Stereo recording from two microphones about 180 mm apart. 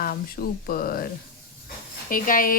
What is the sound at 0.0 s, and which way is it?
Speech, 55° left (ahead or behind).